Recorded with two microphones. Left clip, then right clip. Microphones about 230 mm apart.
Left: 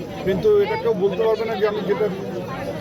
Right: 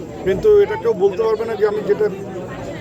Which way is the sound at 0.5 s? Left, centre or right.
Right.